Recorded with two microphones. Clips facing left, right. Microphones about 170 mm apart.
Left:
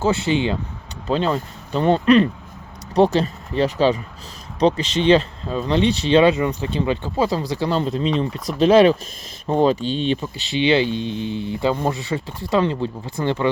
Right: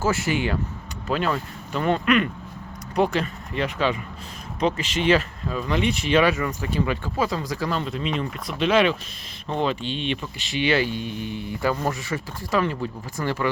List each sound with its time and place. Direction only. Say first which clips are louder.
0.0 s speech: left 4 dB; 20° left (ahead or behind)